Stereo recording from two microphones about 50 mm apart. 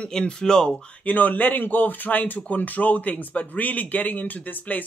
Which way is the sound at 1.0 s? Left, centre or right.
Left.